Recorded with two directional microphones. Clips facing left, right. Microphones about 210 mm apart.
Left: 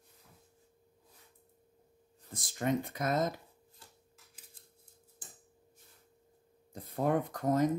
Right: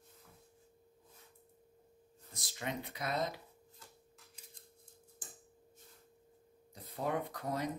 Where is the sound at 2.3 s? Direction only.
50° left (ahead or behind).